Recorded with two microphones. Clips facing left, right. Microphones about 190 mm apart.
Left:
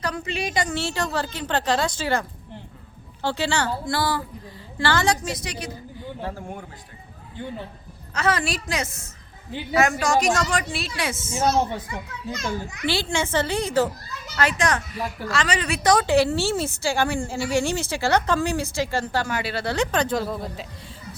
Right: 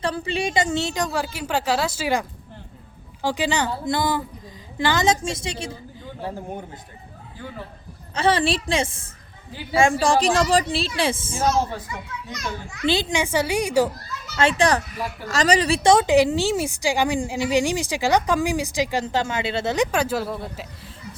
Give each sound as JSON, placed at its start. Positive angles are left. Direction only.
{"t": 0.0, "sound": "a woman's voice", "side_deg": -30}
{"t": 8.1, "sound": "a woman's voice", "side_deg": -30}
{"t": 12.3, "sound": "a child's voice", "side_deg": 30}
{"t": 12.8, "sound": "a woman's voice", "side_deg": -20}
{"t": 14.3, "sound": "a woman's voice", "side_deg": -30}